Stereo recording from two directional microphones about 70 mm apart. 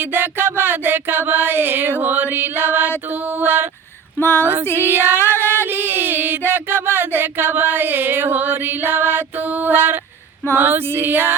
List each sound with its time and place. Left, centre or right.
0.0 s music: right
4.2 s female singing: left
4.8 s female singing: right
5.6 s a sound: right
10.5 s female singing: right